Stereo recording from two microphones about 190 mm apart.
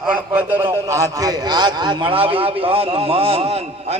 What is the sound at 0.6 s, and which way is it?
A man's voice, 15° right (ahead or behind).